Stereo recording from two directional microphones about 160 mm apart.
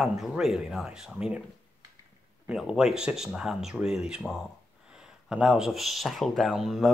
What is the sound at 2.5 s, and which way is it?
Speech, 5° right (ahead or behind).